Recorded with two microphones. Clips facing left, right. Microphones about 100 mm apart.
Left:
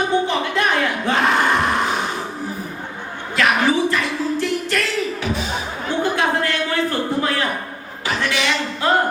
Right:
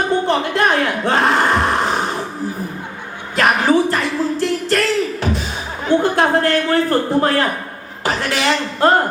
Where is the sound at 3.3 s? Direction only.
45° right (ahead or behind).